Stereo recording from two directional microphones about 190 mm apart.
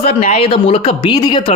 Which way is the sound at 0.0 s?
35° left (ahead or behind).